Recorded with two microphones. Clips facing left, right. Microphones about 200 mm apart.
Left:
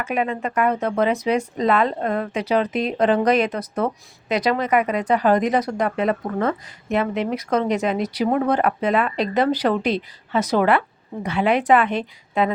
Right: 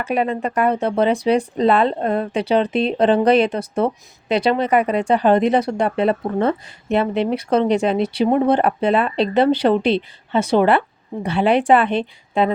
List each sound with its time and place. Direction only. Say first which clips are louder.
0.0 s speech: right 3 dB; 35° right (ahead or behind)